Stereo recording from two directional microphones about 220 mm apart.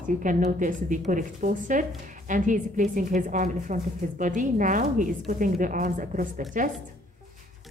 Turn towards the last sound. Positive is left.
turn(degrees=-35)  # may be behind; listen again after turning